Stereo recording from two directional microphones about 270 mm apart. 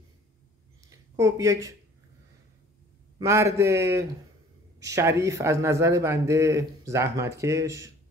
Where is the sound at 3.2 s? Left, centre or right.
Centre.